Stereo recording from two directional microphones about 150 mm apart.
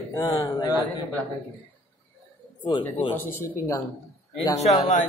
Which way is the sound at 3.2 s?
15° left (ahead or behind).